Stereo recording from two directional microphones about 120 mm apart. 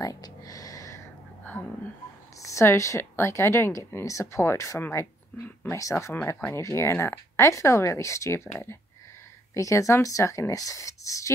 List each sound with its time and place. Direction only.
0.0 s a sound: 30° left (ahead or behind)
2.4 s speech: 25° left (ahead or behind)
9.5 s speech: 25° left (ahead or behind)